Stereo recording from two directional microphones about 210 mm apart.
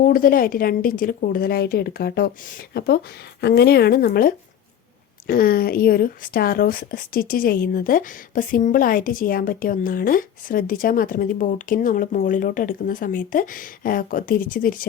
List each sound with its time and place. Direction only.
0.0 s a woman's voice: 40° left (ahead or behind)